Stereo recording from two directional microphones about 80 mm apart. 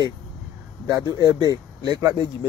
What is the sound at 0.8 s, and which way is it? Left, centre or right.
Speech, right.